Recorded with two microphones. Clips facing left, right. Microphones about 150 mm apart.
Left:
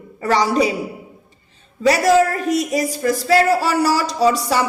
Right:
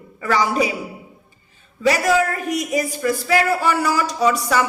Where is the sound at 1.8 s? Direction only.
35° left (ahead or behind).